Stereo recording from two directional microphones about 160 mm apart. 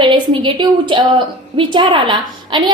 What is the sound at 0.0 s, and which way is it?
A woman's voice, 30° right (ahead or behind).